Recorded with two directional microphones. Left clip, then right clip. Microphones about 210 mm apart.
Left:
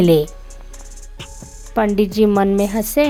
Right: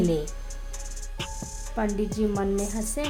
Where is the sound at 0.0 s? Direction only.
40° left (ahead or behind).